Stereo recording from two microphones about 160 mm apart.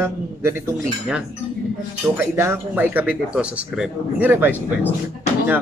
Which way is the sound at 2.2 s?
15° right (ahead or behind).